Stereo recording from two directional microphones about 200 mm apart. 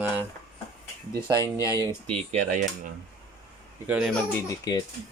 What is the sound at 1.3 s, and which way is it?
Speech, 15° left (ahead or behind).